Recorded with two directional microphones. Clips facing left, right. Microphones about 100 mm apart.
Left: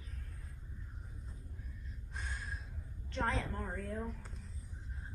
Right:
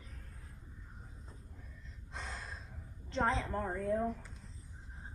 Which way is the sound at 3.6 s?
45° right (ahead or behind).